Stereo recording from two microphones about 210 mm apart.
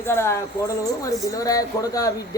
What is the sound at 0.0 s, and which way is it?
A man's voice, 10° left (ahead or behind).